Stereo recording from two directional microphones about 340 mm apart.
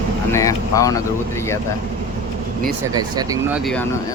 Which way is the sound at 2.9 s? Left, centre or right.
Centre.